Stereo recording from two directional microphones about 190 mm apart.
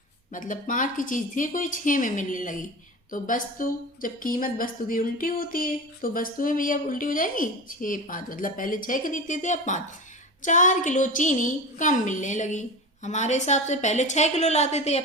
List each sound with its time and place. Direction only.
0.3 s a woman's voice: 45° left (ahead or behind)